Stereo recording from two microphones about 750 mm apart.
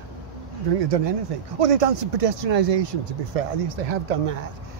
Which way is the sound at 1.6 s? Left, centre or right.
Right.